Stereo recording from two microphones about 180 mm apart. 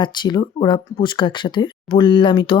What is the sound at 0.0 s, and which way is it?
Speech, 25° left (ahead or behind).